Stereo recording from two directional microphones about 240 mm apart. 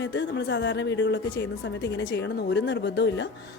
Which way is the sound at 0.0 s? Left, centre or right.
Left.